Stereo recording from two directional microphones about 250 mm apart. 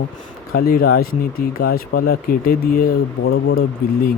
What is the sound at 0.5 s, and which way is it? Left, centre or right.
Speech, left.